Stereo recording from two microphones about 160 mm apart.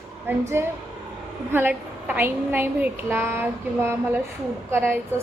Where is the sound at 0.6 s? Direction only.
15° right (ahead or behind).